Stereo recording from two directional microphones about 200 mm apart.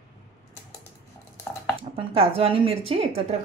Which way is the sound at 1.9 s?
30° right (ahead or behind).